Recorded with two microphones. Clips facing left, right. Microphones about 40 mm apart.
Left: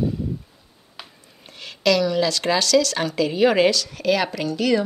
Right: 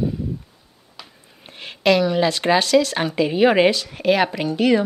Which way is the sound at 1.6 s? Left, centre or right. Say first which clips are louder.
Right 2 dB; right.